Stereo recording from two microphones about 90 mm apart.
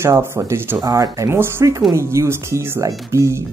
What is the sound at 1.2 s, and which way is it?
Speech, 30° right (ahead or behind).